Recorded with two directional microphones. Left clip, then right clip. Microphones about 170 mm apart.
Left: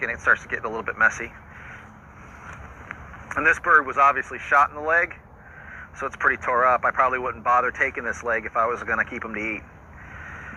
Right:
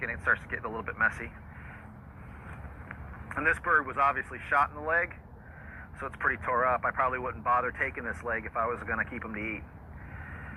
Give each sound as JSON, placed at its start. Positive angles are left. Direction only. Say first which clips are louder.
{"t": 0.0, "sound": "speech", "louder": "left 8 dB", "side_deg": 35}
{"t": 2.5, "sound": "speech", "louder": "left 8 dB", "side_deg": 35}
{"t": 10.2, "sound": "vehicle", "louder": "left 7 dB", "side_deg": 35}